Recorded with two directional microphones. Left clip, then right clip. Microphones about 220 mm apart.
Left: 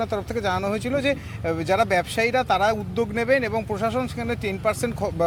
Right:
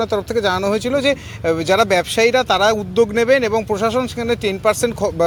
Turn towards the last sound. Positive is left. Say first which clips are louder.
# right 7 dB
turn(degrees=-40)  # may be behind; listen again after turning